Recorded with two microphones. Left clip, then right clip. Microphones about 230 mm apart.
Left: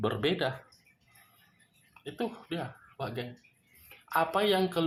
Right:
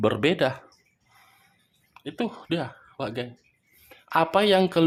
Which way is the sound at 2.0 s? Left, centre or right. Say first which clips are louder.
Right 5 dB; right.